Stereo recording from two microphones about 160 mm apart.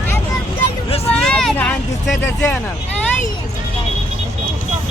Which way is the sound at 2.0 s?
5° left (ahead or behind).